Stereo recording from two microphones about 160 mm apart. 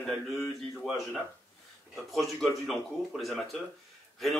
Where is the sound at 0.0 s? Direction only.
Centre (ahead or behind).